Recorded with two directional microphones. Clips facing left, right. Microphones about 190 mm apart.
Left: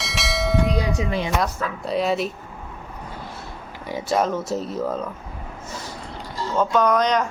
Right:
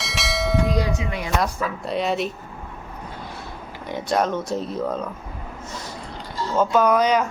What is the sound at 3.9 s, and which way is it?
Speech, 5° left (ahead or behind).